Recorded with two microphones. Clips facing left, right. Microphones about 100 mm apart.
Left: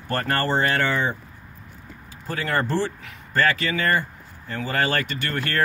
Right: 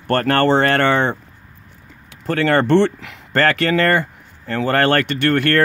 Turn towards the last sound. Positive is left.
turn(degrees=-70)  # may be behind; listen again after turning